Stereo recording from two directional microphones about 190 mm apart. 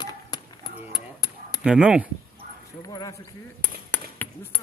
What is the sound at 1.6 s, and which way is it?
Speech, 5° right (ahead or behind).